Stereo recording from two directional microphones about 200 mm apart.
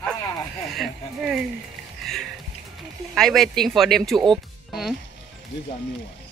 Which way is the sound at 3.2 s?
Centre (ahead or behind).